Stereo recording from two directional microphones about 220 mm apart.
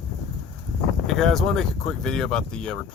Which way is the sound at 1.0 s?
Centre (ahead or behind).